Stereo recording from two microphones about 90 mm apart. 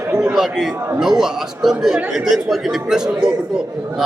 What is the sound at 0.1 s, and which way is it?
A man's voice, 10° right (ahead or behind).